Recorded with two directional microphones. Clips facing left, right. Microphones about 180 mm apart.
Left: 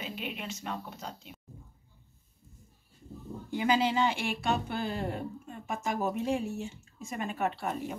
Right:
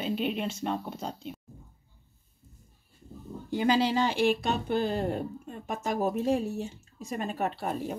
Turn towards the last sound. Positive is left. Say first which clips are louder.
# right 1 dB
turn(degrees=-35)  # may be behind; listen again after turning